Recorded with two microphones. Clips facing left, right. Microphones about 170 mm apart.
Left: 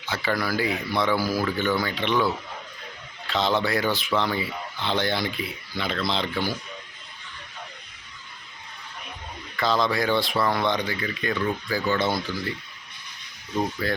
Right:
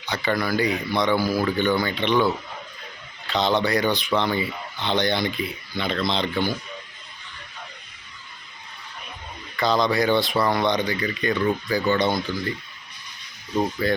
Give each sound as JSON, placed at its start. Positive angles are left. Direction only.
{"t": 0.0, "sound": "speech", "side_deg": 5}
{"t": 9.6, "sound": "speech", "side_deg": 0}
{"t": 13.8, "sound": "speech", "side_deg": 0}